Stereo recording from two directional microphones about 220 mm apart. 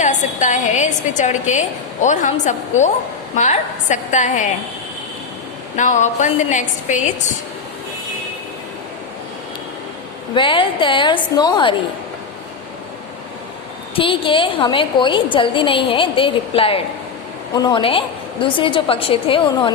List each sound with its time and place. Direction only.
0.0 s a woman's voice: 35° left (ahead or behind)
5.7 s a woman's voice: 35° left (ahead or behind)
10.3 s a woman's voice: 20° left (ahead or behind)
13.9 s a woman's voice: 25° left (ahead or behind)